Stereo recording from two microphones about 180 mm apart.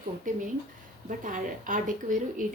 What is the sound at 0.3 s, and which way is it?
A woman's voice, 45° right (ahead or behind).